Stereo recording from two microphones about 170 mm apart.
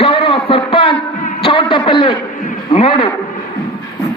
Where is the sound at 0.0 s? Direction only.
35° left (ahead or behind).